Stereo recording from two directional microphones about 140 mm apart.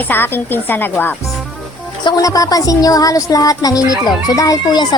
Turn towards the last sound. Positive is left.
turn(degrees=25)  # may be behind; listen again after turning